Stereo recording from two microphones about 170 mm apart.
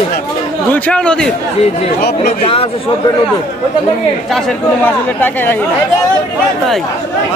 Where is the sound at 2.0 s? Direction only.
65° left (ahead or behind).